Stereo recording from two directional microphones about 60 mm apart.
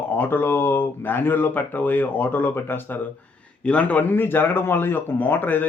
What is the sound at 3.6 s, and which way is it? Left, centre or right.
Speech, left.